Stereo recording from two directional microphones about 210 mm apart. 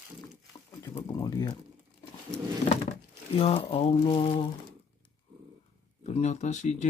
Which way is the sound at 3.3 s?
30° left (ahead or behind).